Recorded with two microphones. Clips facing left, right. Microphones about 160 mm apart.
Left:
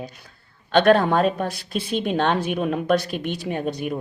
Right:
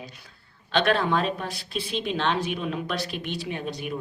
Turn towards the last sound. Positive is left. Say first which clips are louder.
# left 6 dB
turn(degrees=50)  # may be behind; listen again after turning